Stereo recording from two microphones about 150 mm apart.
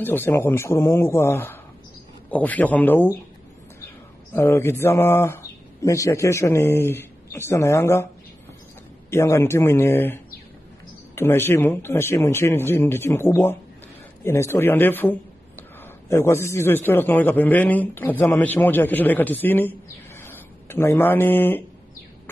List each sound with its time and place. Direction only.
0.0 s speech: 15° left (ahead or behind)
4.3 s speech: 20° left (ahead or behind)
9.1 s a man's voice: 20° left (ahead or behind)